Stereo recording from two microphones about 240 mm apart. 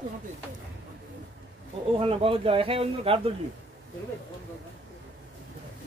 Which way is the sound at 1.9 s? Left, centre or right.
Right.